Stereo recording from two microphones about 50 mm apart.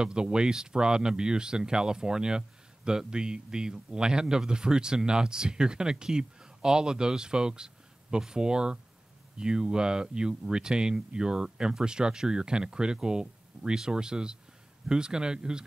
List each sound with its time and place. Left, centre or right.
0.0 s speech: centre